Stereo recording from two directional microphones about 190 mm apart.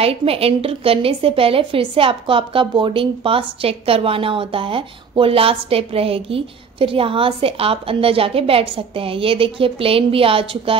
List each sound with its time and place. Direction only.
0.0 s a woman's voice: 30° right (ahead or behind)